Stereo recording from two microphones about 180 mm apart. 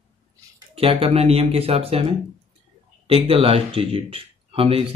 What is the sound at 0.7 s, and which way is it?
Speech, 30° right (ahead or behind).